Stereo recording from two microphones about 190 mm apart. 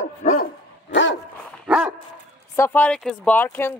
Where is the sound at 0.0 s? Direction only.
40° left (ahead or behind).